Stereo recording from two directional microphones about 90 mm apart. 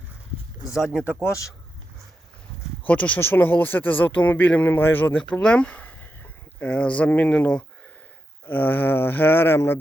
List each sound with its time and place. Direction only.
2.8 s speech: 15° left (ahead or behind)